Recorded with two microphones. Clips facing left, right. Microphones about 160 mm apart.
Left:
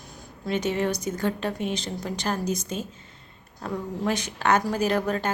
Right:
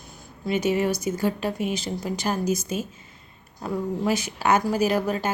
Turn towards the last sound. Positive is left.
turn(degrees=-5)  # may be behind; listen again after turning